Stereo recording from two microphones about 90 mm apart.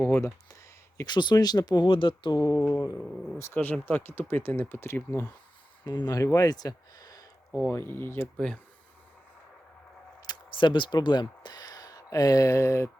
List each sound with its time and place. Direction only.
0.0 s a sound: 30° left (ahead or behind)
0.9 s speech: 50° left (ahead or behind)
2.4 s a sound: 35° left (ahead or behind)
3.6 s speech: 20° left (ahead or behind)
5.8 s speech: 50° left (ahead or behind)
7.7 s speech: 25° left (ahead or behind)
10.2 s speech: 65° left (ahead or behind); by 12.9 s 35° left (ahead or behind)